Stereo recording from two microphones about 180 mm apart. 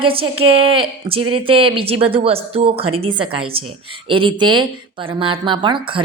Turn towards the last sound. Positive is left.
turn(degrees=-30)  # may be behind; listen again after turning